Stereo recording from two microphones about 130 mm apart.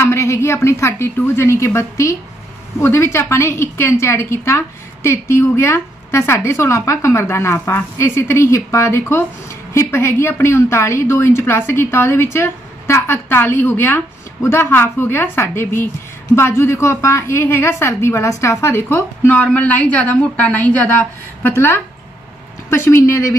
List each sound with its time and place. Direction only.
0.0 s a woman's voice: 20° left (ahead or behind)